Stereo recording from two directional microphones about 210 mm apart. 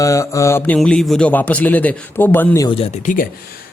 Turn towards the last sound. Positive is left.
turn(degrees=40)  # may be behind; listen again after turning